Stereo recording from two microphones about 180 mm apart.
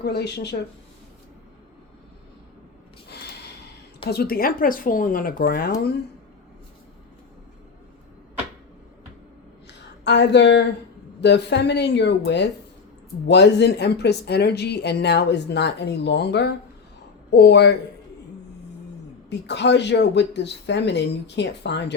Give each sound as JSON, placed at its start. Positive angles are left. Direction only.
{"t": 0.0, "sound": "speech", "side_deg": 65}
{"t": 4.0, "sound": "speech", "side_deg": 60}
{"t": 9.6, "sound": "a sound", "side_deg": 70}
{"t": 11.2, "sound": "speech", "side_deg": 70}
{"t": 19.3, "sound": "speech", "side_deg": 75}